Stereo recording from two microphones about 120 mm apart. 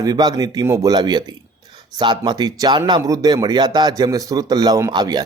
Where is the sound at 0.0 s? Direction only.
35° right (ahead or behind).